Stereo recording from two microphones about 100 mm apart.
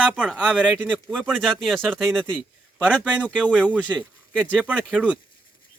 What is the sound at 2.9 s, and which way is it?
Speech, 10° right (ahead or behind).